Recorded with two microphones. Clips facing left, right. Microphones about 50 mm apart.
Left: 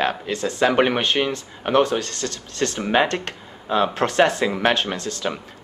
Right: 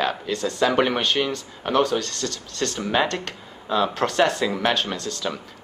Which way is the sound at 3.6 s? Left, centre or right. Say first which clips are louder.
Left 2 dB; left.